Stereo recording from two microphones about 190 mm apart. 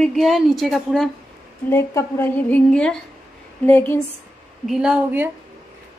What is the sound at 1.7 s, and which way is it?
A woman's voice, 15° left (ahead or behind).